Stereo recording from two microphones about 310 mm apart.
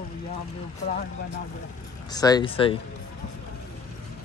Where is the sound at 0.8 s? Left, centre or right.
Left.